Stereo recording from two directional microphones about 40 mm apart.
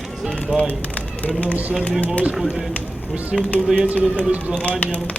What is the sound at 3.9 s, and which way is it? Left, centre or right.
Speech, right.